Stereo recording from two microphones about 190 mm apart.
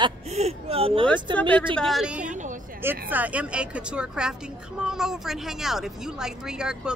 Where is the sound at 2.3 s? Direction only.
40° right (ahead or behind).